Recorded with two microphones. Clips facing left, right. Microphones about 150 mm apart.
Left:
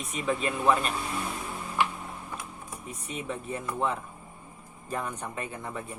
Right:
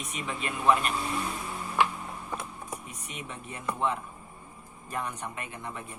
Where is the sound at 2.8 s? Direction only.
30° left (ahead or behind).